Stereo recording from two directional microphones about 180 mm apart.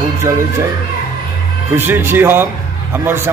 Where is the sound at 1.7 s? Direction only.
10° right (ahead or behind).